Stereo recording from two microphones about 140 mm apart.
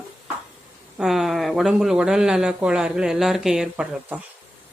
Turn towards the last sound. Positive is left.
turn(degrees=-10)  # may be behind; listen again after turning